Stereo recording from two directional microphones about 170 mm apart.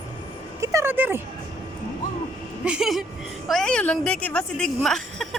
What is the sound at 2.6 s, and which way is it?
Speech, 5° right (ahead or behind).